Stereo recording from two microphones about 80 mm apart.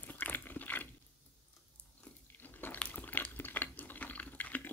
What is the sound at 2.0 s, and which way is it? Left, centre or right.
Biting, left.